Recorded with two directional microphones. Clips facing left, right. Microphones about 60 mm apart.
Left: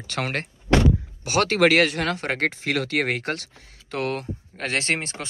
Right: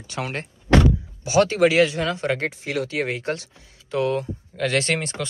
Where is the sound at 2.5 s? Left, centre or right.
Left.